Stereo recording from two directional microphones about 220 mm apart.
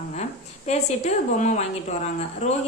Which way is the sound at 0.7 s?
30° left (ahead or behind).